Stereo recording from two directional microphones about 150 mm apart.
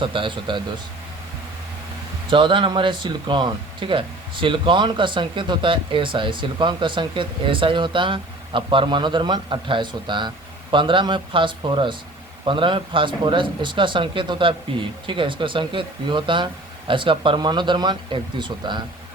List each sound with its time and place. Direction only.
0.0 s speech: 35° right (ahead or behind)
2.3 s speech: 35° right (ahead or behind)